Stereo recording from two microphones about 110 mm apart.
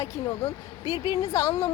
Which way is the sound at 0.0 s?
30° left (ahead or behind).